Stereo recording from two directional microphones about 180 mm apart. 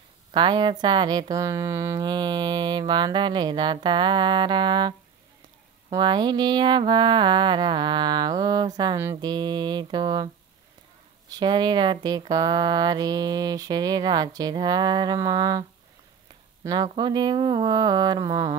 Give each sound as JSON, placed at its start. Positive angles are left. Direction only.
{"t": 0.3, "sound": "speech", "side_deg": -25}
{"t": 11.3, "sound": "speech", "side_deg": -25}
{"t": 16.6, "sound": "speech", "side_deg": -20}